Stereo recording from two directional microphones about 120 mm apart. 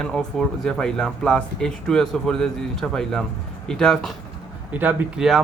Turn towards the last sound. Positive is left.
turn(degrees=-15)  # may be behind; listen again after turning